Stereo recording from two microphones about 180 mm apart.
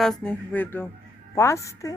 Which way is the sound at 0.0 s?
5° left (ahead or behind).